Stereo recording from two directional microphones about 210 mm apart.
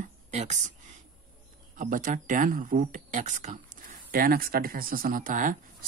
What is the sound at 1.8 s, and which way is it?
Speech, 40° right (ahead or behind).